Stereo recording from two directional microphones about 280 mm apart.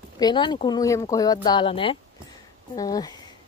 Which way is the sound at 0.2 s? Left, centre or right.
Centre.